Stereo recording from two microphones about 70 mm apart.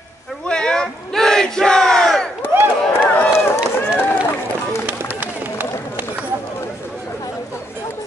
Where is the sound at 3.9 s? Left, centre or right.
Left.